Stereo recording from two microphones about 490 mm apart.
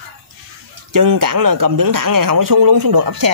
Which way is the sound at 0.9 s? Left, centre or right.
Right.